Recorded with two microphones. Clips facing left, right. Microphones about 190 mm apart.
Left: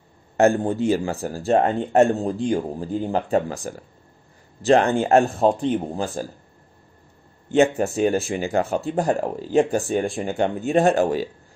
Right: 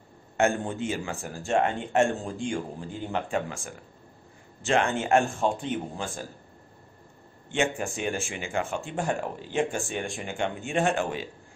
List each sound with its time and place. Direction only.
0.4 s speech: 35° left (ahead or behind)
7.4 s speech: 40° left (ahead or behind)